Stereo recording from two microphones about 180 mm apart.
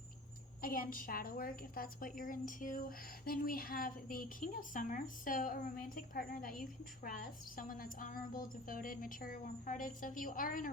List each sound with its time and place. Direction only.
0.6 s a woman's voice: 50° left (ahead or behind)